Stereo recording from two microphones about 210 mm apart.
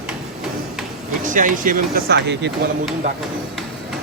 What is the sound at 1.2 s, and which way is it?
Speech, 40° right (ahead or behind).